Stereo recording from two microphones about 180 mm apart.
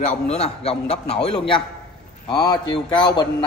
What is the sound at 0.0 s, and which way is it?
A man's voice, 35° left (ahead or behind).